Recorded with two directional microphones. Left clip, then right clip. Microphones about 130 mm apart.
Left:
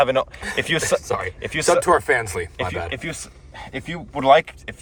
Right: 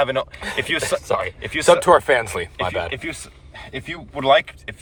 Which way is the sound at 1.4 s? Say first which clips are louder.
Even; 35° left (ahead or behind).